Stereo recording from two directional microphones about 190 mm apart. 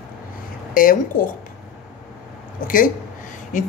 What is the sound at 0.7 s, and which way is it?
Speech, 45° left (ahead or behind).